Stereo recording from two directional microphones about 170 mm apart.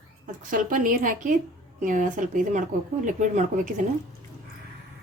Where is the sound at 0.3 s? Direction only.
50° right (ahead or behind).